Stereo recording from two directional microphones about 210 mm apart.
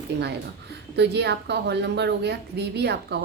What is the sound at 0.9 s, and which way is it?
A woman's voice, 55° right (ahead or behind).